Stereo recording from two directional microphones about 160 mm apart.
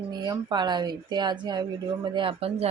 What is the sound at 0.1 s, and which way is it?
A woman's voice, 25° right (ahead or behind).